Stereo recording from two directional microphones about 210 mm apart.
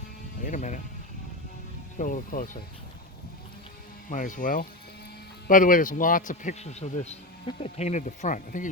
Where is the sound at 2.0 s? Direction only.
40° left (ahead or behind).